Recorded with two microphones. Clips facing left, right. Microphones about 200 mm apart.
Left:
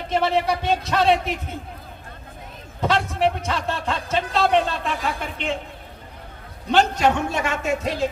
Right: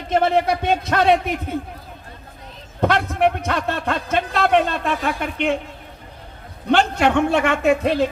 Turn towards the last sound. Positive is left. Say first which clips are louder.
# right 6 dB
turn(degrees=-65)  # may be behind; listen again after turning